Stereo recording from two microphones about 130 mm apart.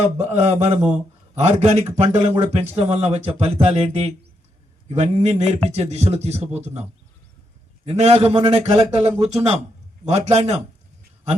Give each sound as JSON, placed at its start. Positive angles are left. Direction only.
{"t": 0.2, "sound": "a man's voice", "side_deg": -60}
{"t": 7.9, "sound": "a man's voice", "side_deg": -55}